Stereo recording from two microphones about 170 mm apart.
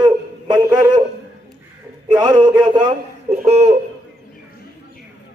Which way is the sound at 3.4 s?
40° right (ahead or behind).